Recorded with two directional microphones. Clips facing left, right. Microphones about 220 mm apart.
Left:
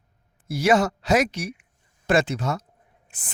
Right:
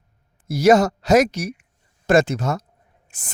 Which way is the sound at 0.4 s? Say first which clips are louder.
Right 5 dB; 40° right (ahead or behind).